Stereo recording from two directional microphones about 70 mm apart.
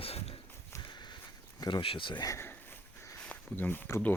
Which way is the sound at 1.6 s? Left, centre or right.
Left.